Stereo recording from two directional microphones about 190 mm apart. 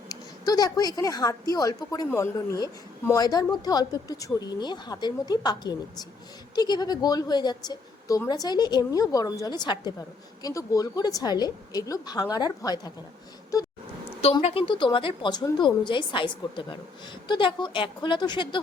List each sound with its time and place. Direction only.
0.1 s a woman's voice: 20° left (ahead or behind)
14.2 s speech: 30° left (ahead or behind)